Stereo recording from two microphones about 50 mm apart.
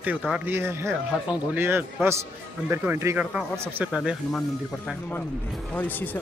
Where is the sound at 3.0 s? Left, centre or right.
Right.